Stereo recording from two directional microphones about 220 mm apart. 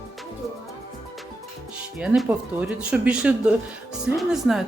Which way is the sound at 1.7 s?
5° right (ahead or behind).